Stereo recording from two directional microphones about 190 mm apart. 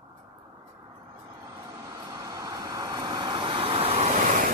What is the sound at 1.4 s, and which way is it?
Vehicle, 20° right (ahead or behind).